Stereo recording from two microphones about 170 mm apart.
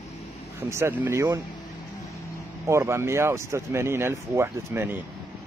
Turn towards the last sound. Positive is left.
turn(degrees=-15)  # may be behind; listen again after turning